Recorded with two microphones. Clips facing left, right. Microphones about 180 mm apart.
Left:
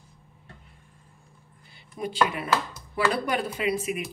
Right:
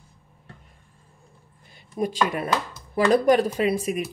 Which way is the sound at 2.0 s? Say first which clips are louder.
Right 2 dB; 45° right (ahead or behind).